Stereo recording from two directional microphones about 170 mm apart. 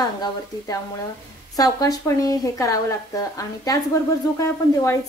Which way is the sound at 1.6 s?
20° left (ahead or behind).